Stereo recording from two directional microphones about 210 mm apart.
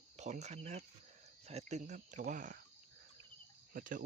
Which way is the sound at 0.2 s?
35° right (ahead or behind).